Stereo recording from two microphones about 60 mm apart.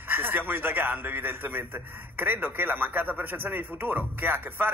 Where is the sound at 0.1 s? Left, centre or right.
Right.